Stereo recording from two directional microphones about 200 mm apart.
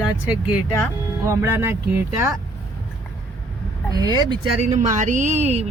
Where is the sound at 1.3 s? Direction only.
10° right (ahead or behind).